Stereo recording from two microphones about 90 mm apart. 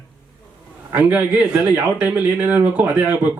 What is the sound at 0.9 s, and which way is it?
Speech, 15° right (ahead or behind).